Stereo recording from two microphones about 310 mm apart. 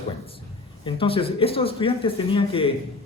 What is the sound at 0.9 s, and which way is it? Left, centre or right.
Speech, centre.